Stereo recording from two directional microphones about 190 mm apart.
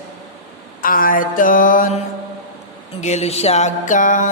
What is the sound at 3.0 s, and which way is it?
Music, 35° left (ahead or behind).